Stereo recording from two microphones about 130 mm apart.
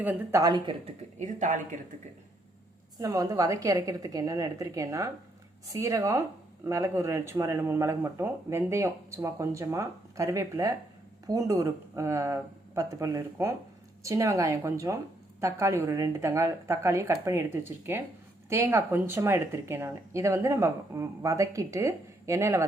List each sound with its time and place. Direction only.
0.0 s speech: 15° right (ahead or behind)
0.3 s speech: 30° right (ahead or behind)
1.2 s speech: 70° right (ahead or behind)
3.0 s speech: 25° right (ahead or behind)